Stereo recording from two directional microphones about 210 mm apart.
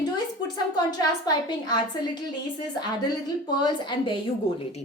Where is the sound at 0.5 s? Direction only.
20° left (ahead or behind).